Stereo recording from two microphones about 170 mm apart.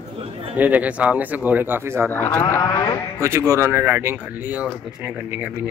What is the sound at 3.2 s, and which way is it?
Speech, 15° right (ahead or behind).